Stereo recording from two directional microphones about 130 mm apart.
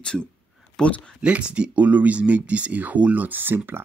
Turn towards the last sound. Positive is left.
turn(degrees=-15)  # may be behind; listen again after turning